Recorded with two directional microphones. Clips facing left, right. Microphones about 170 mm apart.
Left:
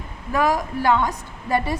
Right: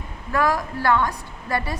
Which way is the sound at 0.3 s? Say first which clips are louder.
Left 1 dB; 15° left (ahead or behind).